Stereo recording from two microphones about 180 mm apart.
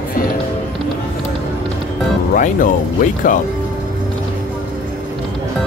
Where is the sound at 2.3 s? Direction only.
45° left (ahead or behind).